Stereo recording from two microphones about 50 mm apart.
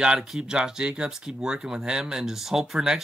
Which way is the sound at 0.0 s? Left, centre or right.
Centre.